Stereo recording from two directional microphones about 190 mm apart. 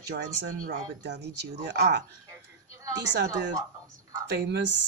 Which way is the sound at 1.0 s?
60° right (ahead or behind).